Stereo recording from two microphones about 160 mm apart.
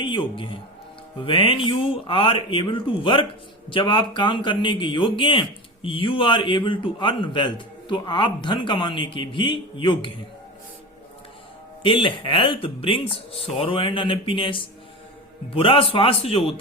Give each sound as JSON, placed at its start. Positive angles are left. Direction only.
{"t": 0.0, "sound": "speech", "side_deg": 30}
{"t": 11.8, "sound": "speech", "side_deg": 35}